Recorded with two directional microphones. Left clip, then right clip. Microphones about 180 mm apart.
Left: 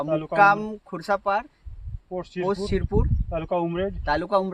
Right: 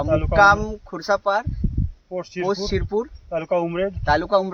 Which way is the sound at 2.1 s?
10° right (ahead or behind).